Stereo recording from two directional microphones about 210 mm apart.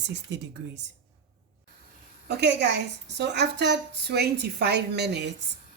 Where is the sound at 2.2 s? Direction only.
55° right (ahead or behind).